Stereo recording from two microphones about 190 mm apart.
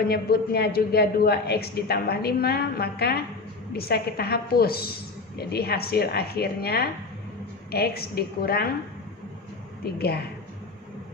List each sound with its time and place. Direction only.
0.1 s a woman's voice: 55° left (ahead or behind)
9.8 s a woman's voice: 55° left (ahead or behind)